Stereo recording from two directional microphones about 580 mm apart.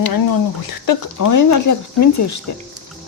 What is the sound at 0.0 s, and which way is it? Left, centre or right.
Speech, left.